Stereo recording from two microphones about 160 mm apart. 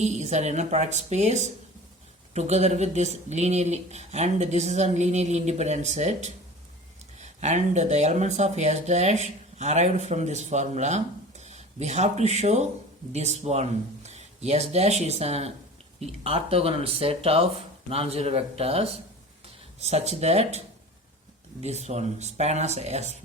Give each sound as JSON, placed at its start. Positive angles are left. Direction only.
{"t": 0.0, "sound": "speech", "side_deg": -45}